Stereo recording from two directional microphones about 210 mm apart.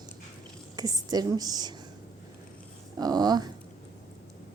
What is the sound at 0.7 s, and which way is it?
A woman's voice, 20° right (ahead or behind).